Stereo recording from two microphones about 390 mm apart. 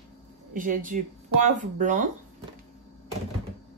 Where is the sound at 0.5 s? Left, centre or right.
Centre.